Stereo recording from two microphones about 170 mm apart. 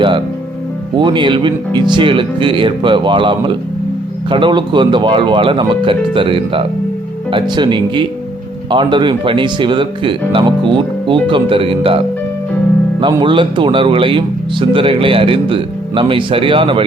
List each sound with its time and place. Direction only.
0.9 s speech: 25° right (ahead or behind)
13.0 s speech: 30° right (ahead or behind)